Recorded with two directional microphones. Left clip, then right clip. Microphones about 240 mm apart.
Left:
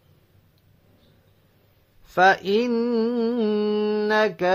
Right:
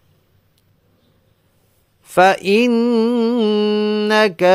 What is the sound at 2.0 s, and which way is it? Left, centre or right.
Mantra, right.